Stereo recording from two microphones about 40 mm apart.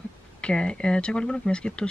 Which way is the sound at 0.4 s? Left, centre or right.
Left.